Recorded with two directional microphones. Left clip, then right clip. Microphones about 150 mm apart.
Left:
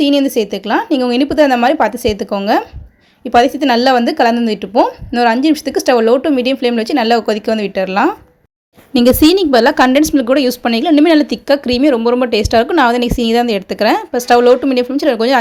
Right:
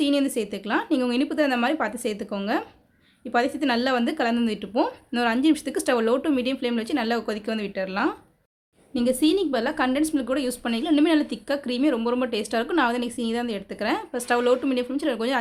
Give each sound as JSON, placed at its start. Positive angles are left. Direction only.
{"t": 0.0, "sound": "speech", "side_deg": 25}
{"t": 8.9, "sound": "a woman's voice", "side_deg": 50}